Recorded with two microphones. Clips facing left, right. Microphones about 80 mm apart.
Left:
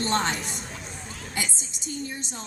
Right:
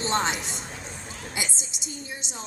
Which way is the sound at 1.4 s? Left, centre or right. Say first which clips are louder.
Left 1 dB; centre.